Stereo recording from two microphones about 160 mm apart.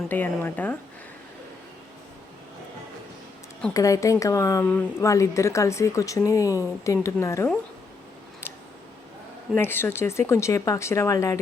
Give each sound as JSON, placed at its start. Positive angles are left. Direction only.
{"t": 0.1, "sound": "speech", "side_deg": 10}
{"t": 3.8, "sound": "a woman's voice", "side_deg": 20}
{"t": 9.6, "sound": "speech", "side_deg": 15}